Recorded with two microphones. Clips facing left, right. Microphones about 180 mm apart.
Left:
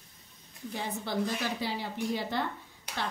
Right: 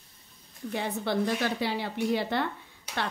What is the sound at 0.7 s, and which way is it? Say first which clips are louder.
A woman's voice: right 5 dB; 65° right (ahead or behind).